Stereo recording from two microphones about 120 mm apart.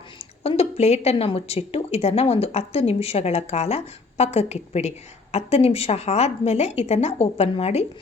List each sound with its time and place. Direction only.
0.4 s a woman's voice: 60° left (ahead or behind)